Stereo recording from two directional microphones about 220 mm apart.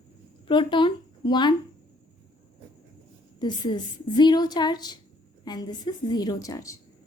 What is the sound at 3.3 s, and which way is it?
A woman's voice, 20° left (ahead or behind).